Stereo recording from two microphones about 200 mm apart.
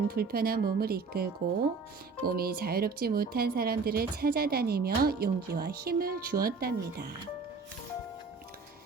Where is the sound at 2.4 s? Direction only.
50° right (ahead or behind).